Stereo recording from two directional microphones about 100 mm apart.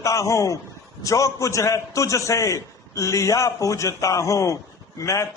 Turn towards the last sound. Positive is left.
turn(degrees=30)  # may be behind; listen again after turning